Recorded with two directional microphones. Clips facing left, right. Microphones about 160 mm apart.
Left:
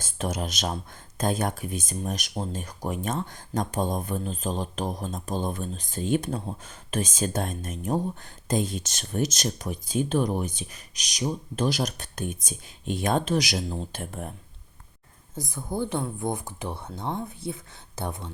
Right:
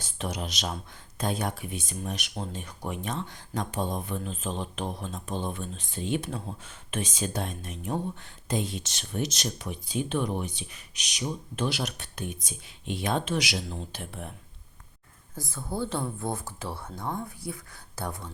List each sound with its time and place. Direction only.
0.0 s speech: 45° left (ahead or behind)
15.4 s speech: 15° left (ahead or behind)